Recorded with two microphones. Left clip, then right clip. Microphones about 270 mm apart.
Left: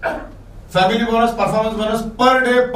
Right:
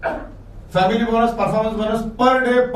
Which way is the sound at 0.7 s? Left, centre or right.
Centre.